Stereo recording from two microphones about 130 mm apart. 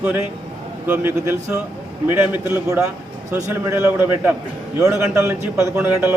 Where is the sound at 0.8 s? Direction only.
15° right (ahead or behind).